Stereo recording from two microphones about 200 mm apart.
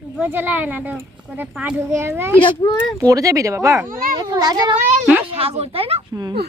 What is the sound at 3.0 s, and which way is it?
Speech, 15° right (ahead or behind).